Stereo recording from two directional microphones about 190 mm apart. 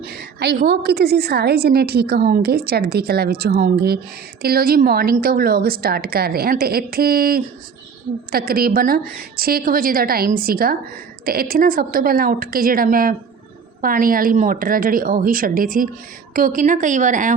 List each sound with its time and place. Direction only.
0.0 s a woman's voice: 60° right (ahead or behind); by 17.3 s 40° right (ahead or behind)